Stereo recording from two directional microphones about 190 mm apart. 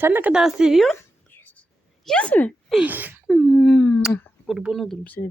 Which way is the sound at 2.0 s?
5° left (ahead or behind).